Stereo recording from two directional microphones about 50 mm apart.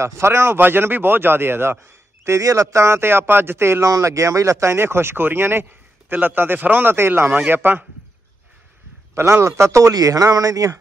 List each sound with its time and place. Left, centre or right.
0.0 s speech: right
0.6 s a man's voice: right
2.2 s a man's voice: right
4.7 s speech: right
7.0 s a man's voice: right
9.1 s a man's voice: right
9.6 s speech: right